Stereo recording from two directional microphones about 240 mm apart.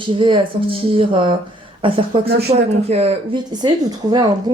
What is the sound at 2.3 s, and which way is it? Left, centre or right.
Speech, right.